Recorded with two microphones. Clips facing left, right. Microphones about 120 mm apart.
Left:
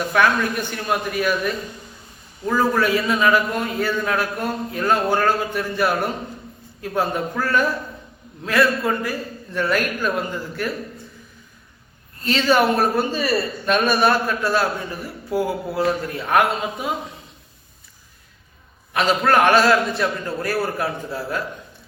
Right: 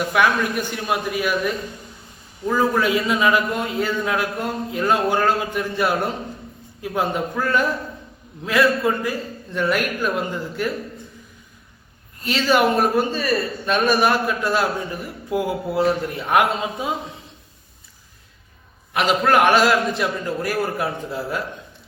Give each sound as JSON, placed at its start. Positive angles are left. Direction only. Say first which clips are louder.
{"t": 0.1, "sound": "a man's voice", "louder": "left 2 dB", "side_deg": -10}
{"t": 12.2, "sound": "a man's voice", "louder": "left 1 dB", "side_deg": -10}
{"t": 13.1, "sound": "speech", "louder": "even", "side_deg": 5}
{"t": 13.8, "sound": "a man's voice", "louder": "right 2 dB", "side_deg": -10}
{"t": 18.9, "sound": "a man's voice", "louder": "even", "side_deg": -10}